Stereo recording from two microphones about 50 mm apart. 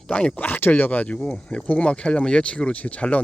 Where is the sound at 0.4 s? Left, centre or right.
Left.